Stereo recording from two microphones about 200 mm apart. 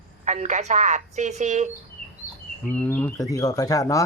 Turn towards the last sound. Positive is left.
turn(degrees=15)  # may be behind; listen again after turning